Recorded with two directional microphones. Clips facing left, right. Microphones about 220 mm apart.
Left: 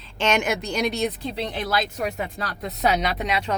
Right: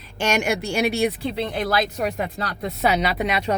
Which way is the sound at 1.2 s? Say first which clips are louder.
Right 3 dB; 55° right (ahead or behind).